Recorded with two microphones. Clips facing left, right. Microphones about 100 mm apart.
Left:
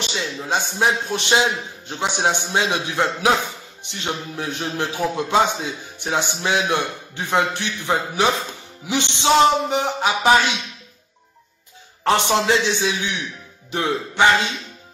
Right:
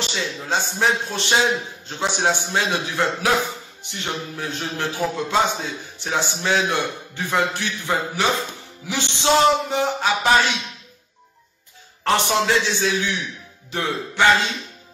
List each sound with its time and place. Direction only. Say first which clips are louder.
0.0 s a man's voice: even; 15° left (ahead or behind)
12.0 s a man's voice: left 1 dB; 20° left (ahead or behind)